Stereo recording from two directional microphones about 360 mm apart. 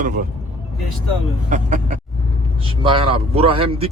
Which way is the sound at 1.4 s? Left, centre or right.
Centre.